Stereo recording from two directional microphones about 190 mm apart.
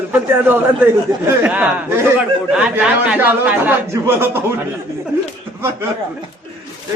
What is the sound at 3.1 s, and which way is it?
A man's voice, 10° right (ahead or behind).